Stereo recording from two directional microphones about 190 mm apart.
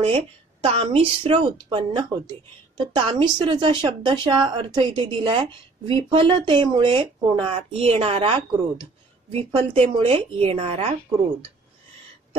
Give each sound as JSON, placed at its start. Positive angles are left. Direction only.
{"t": 0.0, "sound": "a woman's voice", "side_deg": -30}